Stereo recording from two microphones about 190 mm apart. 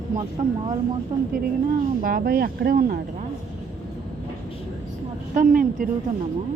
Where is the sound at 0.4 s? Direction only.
35° right (ahead or behind).